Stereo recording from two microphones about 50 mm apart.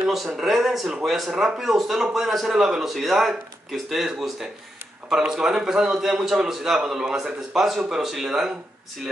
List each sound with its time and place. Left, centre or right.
0.0 s a man's voice: centre